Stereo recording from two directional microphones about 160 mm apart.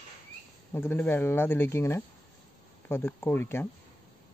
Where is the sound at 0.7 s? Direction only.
10° left (ahead or behind).